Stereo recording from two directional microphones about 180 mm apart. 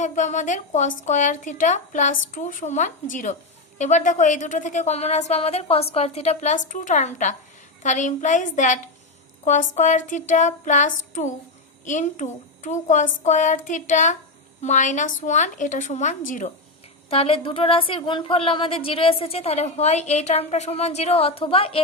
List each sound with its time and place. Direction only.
0.0 s a woman's voice: 45° left (ahead or behind)
17.1 s a woman's voice: 30° left (ahead or behind)